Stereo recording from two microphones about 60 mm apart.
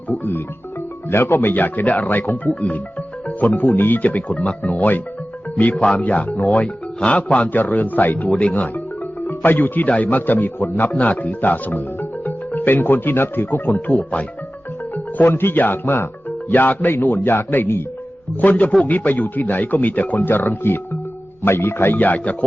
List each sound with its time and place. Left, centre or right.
0.2 s speech: left
18.3 s speech: left